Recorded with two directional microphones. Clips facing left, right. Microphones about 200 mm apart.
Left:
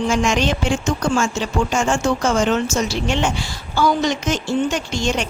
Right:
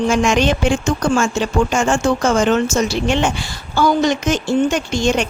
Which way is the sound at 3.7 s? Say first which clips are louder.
Right 3 dB; 50° right (ahead or behind).